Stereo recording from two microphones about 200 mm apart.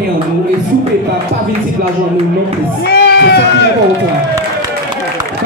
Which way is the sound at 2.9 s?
55° left (ahead or behind).